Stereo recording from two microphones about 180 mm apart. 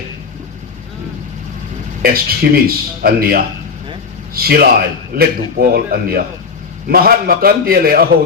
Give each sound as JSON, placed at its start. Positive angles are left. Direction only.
{"t": 2.0, "sound": "speech", "side_deg": -55}